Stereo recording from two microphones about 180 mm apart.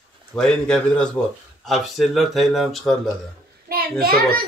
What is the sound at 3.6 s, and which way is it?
Speech, 55° right (ahead or behind).